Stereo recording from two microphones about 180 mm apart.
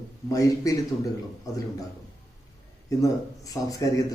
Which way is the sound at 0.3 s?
20° left (ahead or behind).